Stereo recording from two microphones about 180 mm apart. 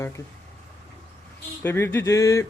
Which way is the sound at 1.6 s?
10° left (ahead or behind).